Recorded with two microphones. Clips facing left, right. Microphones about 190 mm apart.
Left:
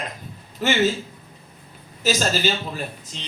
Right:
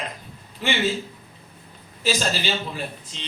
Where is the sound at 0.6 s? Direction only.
45° left (ahead or behind).